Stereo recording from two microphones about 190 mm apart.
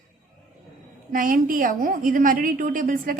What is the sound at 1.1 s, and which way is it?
A woman's voice, 45° right (ahead or behind).